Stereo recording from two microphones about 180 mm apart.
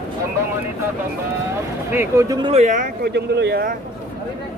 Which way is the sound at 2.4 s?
35° right (ahead or behind).